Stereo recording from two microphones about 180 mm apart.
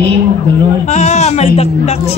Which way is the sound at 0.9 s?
40° left (ahead or behind).